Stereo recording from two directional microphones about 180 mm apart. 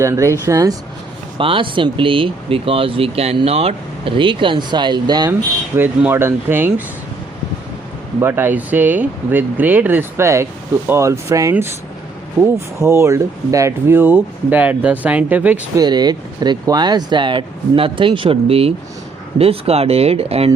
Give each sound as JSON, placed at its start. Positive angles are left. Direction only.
{"t": 0.0, "sound": "speech", "side_deg": -15}
{"t": 1.4, "sound": "speech", "side_deg": -30}
{"t": 5.7, "sound": "speech", "side_deg": -10}
{"t": 8.2, "sound": "speech", "side_deg": -10}
{"t": 12.8, "sound": "speech", "side_deg": -15}
{"t": 15.8, "sound": "speech", "side_deg": -20}